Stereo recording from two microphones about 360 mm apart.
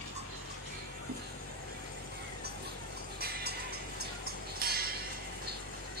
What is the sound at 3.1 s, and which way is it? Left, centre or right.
Music, right.